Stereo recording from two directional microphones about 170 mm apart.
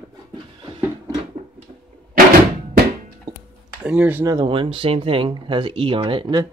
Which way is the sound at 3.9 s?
10° right (ahead or behind).